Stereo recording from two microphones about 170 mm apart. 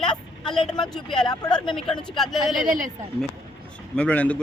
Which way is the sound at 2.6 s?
50° right (ahead or behind).